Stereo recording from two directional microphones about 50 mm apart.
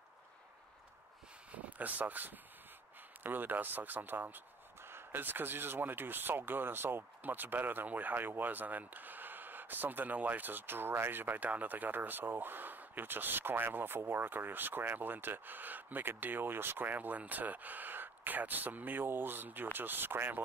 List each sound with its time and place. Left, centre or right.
1.5 s speech: right
7.2 s speech: right